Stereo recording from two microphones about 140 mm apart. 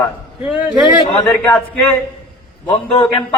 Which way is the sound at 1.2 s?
10° left (ahead or behind).